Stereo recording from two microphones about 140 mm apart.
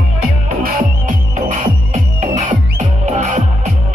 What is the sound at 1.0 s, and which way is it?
Music, 65° right (ahead or behind).